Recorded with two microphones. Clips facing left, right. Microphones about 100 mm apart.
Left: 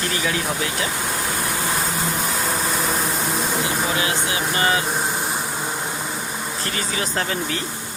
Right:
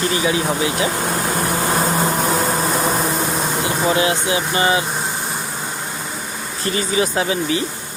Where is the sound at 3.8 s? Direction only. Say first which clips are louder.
Right 6 dB; 30° right (ahead or behind).